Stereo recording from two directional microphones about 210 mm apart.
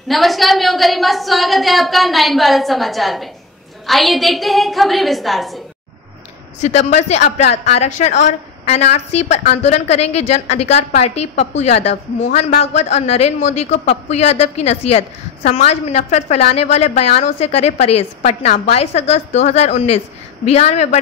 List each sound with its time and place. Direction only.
0.1 s a woman's voice: centre (ahead or behind)
6.6 s a woman's voice: 30° left (ahead or behind)